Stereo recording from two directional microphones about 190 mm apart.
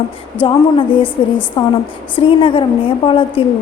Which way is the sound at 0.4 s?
25° left (ahead or behind).